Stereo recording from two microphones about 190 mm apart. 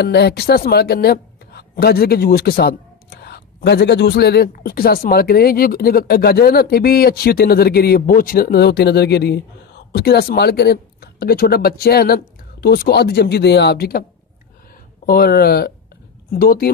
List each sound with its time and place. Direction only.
0.0 s a man's voice: 60° left (ahead or behind)
15.0 s a man's voice: 55° left (ahead or behind)